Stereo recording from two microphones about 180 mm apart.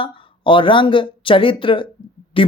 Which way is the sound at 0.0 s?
30° left (ahead or behind).